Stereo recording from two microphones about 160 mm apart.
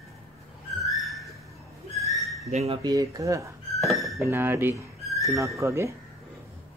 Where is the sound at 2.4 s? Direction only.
40° right (ahead or behind).